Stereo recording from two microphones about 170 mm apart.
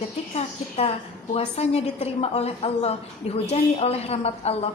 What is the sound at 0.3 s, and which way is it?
A woman's voice, 35° left (ahead or behind).